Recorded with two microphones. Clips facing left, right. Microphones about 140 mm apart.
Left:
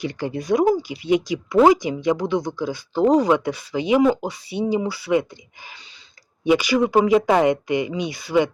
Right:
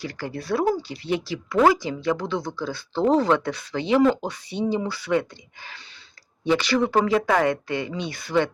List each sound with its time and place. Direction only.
0.0 s speech: 20° left (ahead or behind)
6.4 s speech: 10° left (ahead or behind)